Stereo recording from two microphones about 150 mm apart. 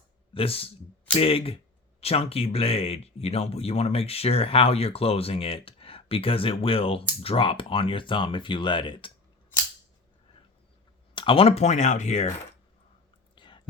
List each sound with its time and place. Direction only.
0.3 s speech: 40° left (ahead or behind)
11.1 s speech: 35° left (ahead or behind)
13.3 s whispering: 30° left (ahead or behind)